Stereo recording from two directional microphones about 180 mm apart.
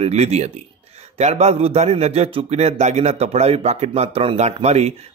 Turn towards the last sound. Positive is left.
turn(degrees=-35)  # may be behind; listen again after turning